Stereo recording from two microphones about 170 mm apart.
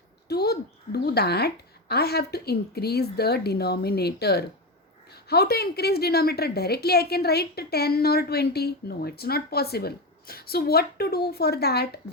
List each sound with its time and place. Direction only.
0.3 s a woman's voice: 70° left (ahead or behind)